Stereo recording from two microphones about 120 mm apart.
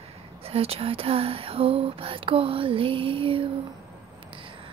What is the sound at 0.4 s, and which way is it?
Speech, 55° right (ahead or behind).